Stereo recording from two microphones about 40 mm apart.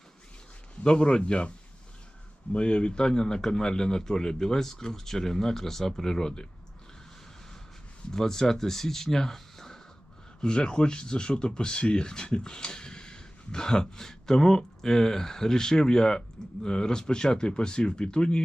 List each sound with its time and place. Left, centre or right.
0.9 s a man's voice: left
8.1 s speech: centre
10.4 s speech: left